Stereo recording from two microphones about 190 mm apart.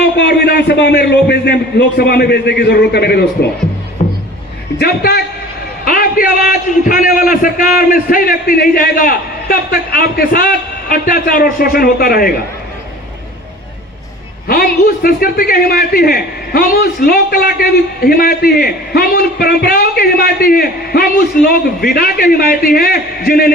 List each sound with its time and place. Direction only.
0.2 s a man's voice: 65° left (ahead or behind)
4.0 s music: 35° left (ahead or behind)
4.8 s a man's voice: 60° left (ahead or behind)
14.4 s a man's voice: 50° left (ahead or behind)